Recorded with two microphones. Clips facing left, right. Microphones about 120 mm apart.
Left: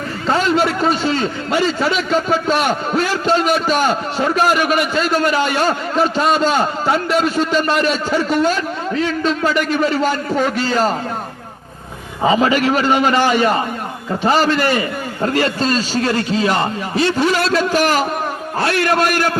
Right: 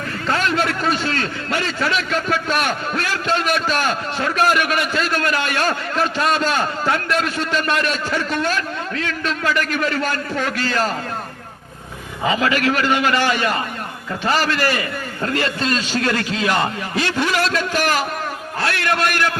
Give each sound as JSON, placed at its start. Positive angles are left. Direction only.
{"t": 0.3, "sound": "a man's voice", "side_deg": 30}
{"t": 12.2, "sound": "a man's voice", "side_deg": 35}